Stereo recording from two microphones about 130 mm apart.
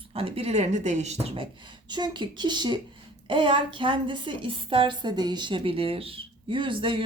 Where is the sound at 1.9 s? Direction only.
35° right (ahead or behind).